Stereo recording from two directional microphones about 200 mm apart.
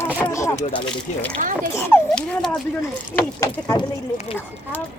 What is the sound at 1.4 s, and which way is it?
Speech, 40° right (ahead or behind).